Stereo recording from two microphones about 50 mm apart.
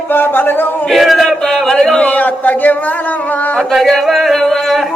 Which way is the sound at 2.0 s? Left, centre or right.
Left.